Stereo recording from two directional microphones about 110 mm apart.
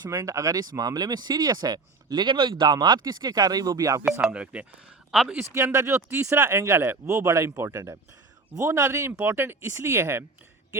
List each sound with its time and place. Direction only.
0.0 s speech: 30° right (ahead or behind)
4.2 s speech: 10° right (ahead or behind)
5.4 s speech: 25° right (ahead or behind)